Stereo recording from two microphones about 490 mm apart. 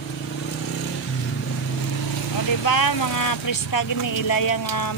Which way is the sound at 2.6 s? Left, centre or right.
Left.